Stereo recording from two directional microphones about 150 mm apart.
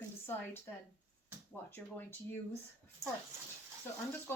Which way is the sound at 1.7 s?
15° left (ahead or behind).